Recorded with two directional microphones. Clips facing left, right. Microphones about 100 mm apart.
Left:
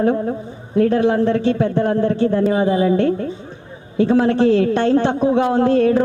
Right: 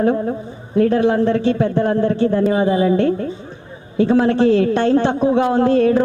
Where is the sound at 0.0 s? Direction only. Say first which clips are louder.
Even; 30° right (ahead or behind).